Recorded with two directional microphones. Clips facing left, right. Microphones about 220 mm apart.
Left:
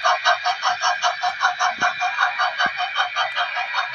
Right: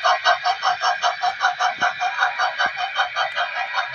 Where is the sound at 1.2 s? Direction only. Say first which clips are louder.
Right 1 dB; 35° right (ahead or behind).